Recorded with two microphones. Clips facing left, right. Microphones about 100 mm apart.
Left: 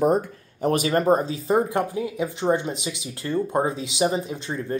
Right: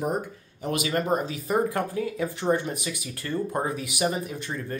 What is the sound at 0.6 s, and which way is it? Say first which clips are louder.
Speech: left 7 dB; 40° left (ahead or behind).